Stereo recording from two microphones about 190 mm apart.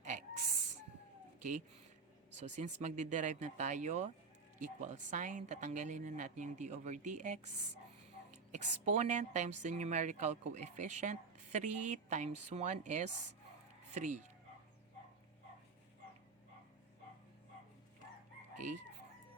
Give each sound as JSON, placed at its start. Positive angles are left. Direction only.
{"t": 0.0, "sound": "a sound", "side_deg": -40}
{"t": 1.4, "sound": "speech", "side_deg": -40}
{"t": 18.5, "sound": "chicken", "side_deg": -40}